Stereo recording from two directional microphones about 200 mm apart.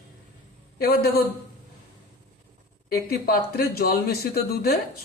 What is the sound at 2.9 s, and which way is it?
Speech, 50° left (ahead or behind).